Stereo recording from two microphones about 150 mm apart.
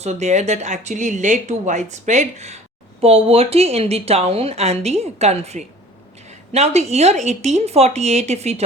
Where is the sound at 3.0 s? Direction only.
40° right (ahead or behind).